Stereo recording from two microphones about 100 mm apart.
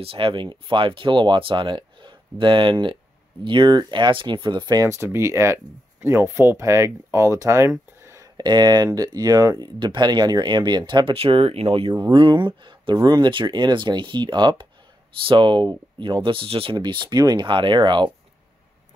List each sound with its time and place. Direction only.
0.0 s speech: 65° right (ahead or behind); by 4.8 s 45° right (ahead or behind)
4.8 s speech: 30° right (ahead or behind)
8.0 s a sound: 30° right (ahead or behind)
8.4 s speech: 45° right (ahead or behind)
11.1 s speech: 75° right (ahead or behind)
12.0 s speech: 55° right (ahead or behind)
16.7 s speech: 50° right (ahead or behind)